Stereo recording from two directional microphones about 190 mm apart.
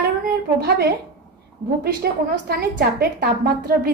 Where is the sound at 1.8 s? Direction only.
55° right (ahead or behind).